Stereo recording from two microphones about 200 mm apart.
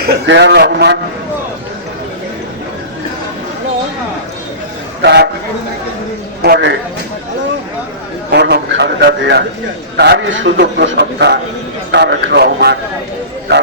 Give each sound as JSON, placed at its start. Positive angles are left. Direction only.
{"t": 0.0, "sound": "a man's voice", "side_deg": -60}
{"t": 5.0, "sound": "a man's voice", "side_deg": -55}
{"t": 6.4, "sound": "a man's voice", "side_deg": -60}
{"t": 8.3, "sound": "a man's voice", "side_deg": -55}